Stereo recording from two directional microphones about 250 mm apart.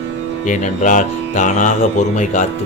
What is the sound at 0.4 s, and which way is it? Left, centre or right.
Speech, left.